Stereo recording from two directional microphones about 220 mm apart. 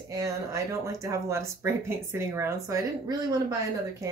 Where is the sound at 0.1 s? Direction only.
15° right (ahead or behind).